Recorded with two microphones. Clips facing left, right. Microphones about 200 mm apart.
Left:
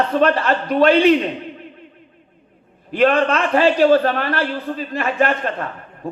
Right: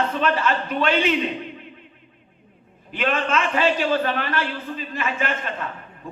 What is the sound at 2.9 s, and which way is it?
A man's voice, 40° left (ahead or behind).